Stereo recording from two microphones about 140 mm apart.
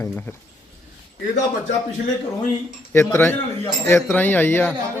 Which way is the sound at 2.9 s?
15° left (ahead or behind).